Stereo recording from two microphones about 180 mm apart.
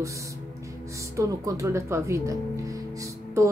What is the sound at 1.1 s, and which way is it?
Speech, 20° right (ahead or behind).